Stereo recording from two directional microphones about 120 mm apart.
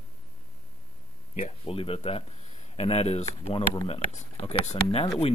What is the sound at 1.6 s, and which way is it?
Speech, 50° left (ahead or behind).